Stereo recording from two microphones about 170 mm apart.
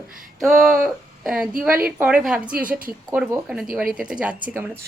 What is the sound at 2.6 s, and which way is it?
Speech, 55° right (ahead or behind).